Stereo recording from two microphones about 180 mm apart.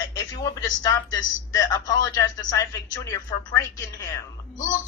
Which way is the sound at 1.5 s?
20° left (ahead or behind).